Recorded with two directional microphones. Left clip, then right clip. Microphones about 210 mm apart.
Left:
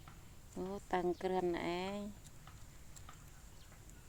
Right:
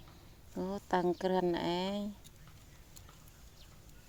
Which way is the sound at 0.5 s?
35° right (ahead or behind).